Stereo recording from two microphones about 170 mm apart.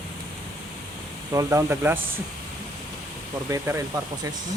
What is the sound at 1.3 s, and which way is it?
Speech, 20° right (ahead or behind).